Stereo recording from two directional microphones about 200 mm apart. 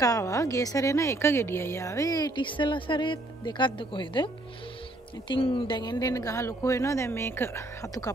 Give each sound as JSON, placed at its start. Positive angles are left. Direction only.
{"t": 0.0, "sound": "a woman's voice", "side_deg": 15}
{"t": 5.3, "sound": "a woman's voice", "side_deg": 25}